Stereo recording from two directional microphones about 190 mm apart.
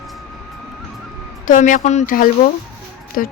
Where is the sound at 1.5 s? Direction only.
45° left (ahead or behind).